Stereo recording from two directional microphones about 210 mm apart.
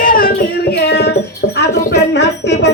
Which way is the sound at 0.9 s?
50° left (ahead or behind).